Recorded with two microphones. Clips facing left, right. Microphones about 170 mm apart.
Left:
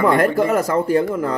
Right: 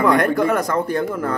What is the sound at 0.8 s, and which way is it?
Speech, 10° left (ahead or behind).